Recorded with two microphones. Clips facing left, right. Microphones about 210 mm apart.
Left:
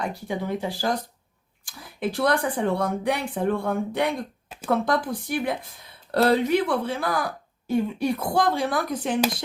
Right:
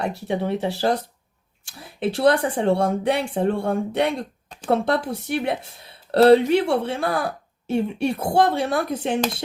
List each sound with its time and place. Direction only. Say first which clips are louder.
0.0 s a woman's voice: right 4 dB; 25° right (ahead or behind)